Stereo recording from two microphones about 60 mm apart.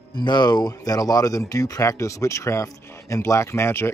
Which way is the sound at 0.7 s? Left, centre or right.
Left.